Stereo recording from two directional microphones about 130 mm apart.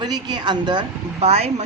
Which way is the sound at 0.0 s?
35° right (ahead or behind).